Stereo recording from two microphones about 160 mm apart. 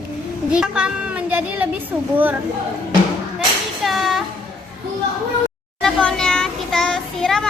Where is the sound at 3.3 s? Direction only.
Centre (ahead or behind).